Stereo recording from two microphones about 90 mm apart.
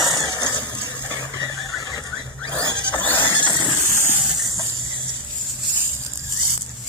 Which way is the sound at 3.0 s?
25° left (ahead or behind).